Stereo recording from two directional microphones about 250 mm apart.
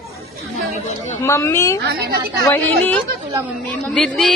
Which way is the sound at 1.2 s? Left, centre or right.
Centre.